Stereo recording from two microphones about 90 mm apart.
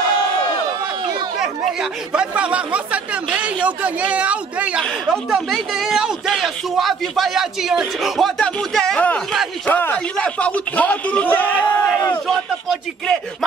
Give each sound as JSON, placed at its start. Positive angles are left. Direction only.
{"t": 1.4, "sound": "speech", "side_deg": -5}
{"t": 5.0, "sound": "speech", "side_deg": 0}
{"t": 8.4, "sound": "speech", "side_deg": 10}
{"t": 9.7, "sound": "speech", "side_deg": 20}
{"t": 12.3, "sound": "speech", "side_deg": 5}